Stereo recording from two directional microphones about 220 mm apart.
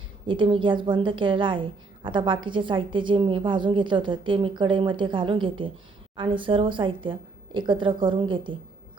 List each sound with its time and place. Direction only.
0.3 s a woman's voice: 20° right (ahead or behind)